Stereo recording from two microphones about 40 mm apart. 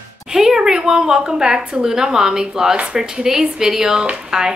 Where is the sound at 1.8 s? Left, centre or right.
Centre.